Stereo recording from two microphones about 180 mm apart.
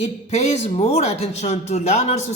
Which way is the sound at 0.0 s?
35° left (ahead or behind).